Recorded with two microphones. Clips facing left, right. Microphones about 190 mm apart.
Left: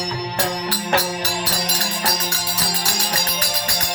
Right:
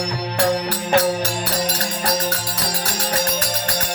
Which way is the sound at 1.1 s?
55° right (ahead or behind).